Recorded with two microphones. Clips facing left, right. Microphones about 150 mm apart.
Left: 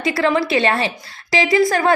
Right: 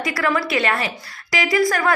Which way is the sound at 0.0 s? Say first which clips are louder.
Left 4 dB; 25° left (ahead or behind).